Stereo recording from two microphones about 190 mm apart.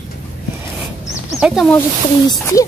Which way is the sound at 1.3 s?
Centre (ahead or behind).